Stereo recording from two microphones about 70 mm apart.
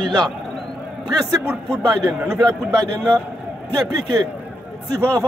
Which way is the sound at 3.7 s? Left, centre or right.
Right.